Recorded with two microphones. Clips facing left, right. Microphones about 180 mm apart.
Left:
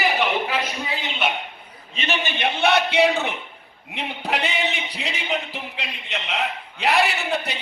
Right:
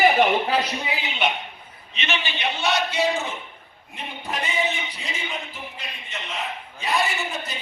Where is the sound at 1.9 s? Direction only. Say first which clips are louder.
Left 3 dB; 45° left (ahead or behind).